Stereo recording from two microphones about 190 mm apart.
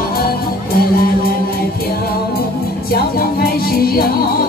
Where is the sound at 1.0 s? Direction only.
50° left (ahead or behind).